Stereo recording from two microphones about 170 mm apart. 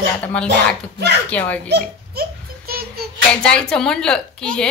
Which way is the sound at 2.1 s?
65° right (ahead or behind).